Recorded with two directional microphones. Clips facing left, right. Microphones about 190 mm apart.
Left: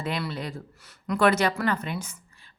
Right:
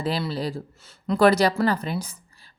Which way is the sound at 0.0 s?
30° right (ahead or behind).